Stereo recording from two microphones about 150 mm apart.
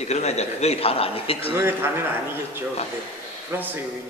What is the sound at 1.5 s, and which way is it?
Speech, 15° right (ahead or behind).